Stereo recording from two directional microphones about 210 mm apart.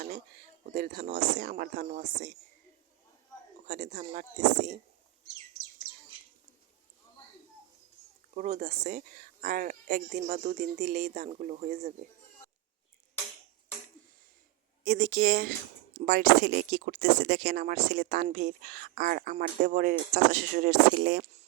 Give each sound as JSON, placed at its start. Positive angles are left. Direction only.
{"t": 0.7, "sound": "speech", "side_deg": -35}
{"t": 3.7, "sound": "speech", "side_deg": -35}
{"t": 8.4, "sound": "speech", "side_deg": -35}
{"t": 14.8, "sound": "speech", "side_deg": -40}